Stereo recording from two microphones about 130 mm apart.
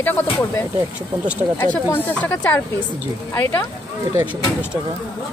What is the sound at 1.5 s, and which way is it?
Speech, 15° left (ahead or behind).